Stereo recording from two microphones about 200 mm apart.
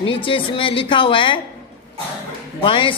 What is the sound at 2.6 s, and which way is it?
Speech, 25° left (ahead or behind).